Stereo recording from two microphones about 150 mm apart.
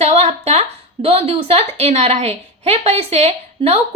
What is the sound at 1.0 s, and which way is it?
A woman's voice, 40° right (ahead or behind).